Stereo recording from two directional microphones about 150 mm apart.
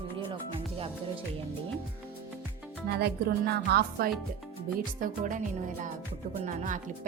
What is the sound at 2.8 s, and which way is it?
Speech, 90° right.